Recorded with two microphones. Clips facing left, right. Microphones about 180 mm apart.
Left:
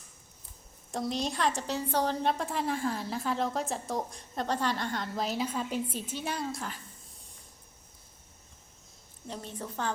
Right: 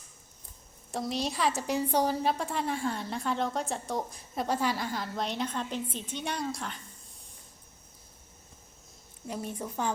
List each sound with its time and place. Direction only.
0.9 s a woman's voice: centre (ahead or behind)
2.2 s a woman's voice: centre (ahead or behind)
9.2 s a woman's voice: 10° right (ahead or behind)